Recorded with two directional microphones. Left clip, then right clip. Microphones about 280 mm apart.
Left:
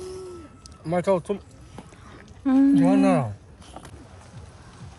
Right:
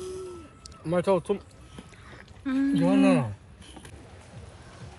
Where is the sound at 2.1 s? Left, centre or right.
Centre.